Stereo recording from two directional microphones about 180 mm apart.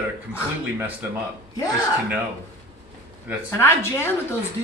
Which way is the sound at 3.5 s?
15° left (ahead or behind).